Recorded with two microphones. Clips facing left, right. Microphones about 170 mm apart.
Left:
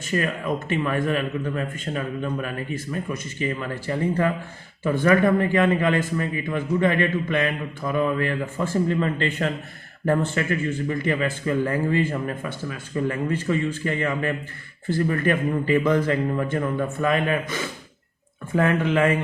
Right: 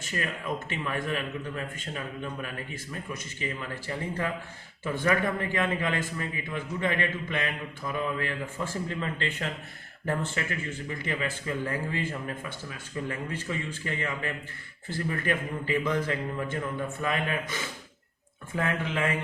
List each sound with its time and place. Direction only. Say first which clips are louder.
0.1 s a man's voice: left 8 dB; 60° left (ahead or behind)
10.8 s a man's voice: left 7 dB; 60° left (ahead or behind)